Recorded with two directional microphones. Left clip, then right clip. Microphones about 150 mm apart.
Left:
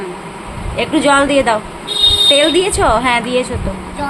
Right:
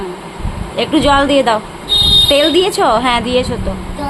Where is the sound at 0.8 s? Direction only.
15° right (ahead or behind).